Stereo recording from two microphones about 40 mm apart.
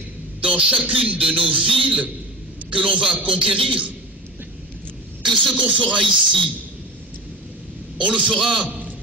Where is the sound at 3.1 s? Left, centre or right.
Right.